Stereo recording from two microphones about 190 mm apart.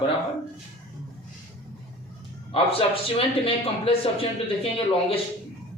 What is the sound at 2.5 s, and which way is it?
Speech, 30° left (ahead or behind).